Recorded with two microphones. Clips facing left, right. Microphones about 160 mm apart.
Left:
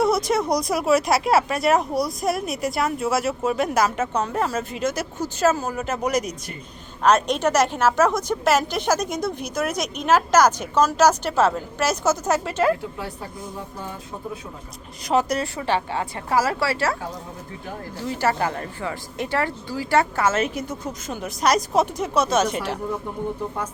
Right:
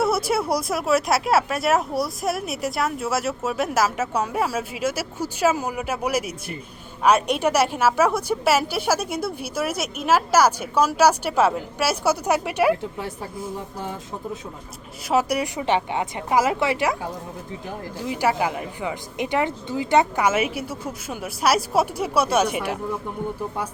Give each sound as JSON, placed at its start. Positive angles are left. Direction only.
{"t": 0.0, "sound": "a woman's voice", "side_deg": -5}
{"t": 15.0, "sound": "a woman's voice", "side_deg": -5}
{"t": 18.0, "sound": "a woman's voice", "side_deg": -10}